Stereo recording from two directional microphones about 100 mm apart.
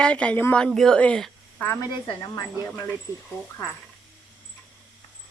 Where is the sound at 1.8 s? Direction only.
40° left (ahead or behind).